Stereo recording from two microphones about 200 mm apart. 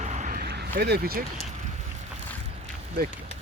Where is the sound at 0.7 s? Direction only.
50° right (ahead or behind).